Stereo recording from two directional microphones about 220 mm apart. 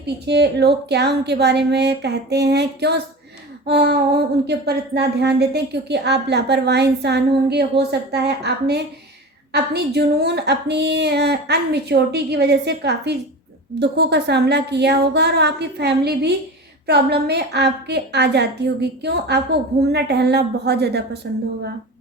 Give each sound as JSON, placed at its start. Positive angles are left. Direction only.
{"t": 0.0, "sound": "a woman's voice", "side_deg": -50}